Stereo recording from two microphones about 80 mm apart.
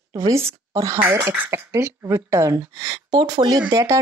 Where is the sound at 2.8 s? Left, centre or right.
Right.